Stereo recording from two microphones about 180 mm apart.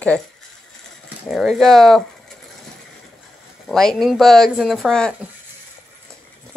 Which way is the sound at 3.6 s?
Centre (ahead or behind).